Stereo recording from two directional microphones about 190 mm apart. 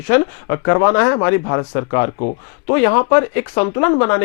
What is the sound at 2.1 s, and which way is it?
Speech, 35° left (ahead or behind).